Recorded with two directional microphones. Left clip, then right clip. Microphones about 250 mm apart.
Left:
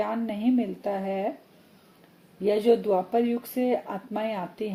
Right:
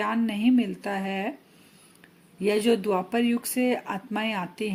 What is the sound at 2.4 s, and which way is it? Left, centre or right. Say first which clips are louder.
Speech: left 2 dB; right.